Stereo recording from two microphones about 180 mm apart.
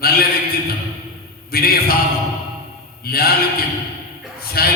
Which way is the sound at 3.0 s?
60° left (ahead or behind).